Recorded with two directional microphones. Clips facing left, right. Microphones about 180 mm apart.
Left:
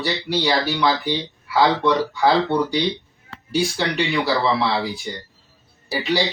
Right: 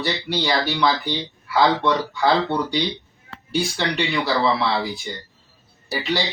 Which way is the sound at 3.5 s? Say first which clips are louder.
Left 2 dB; centre (ahead or behind).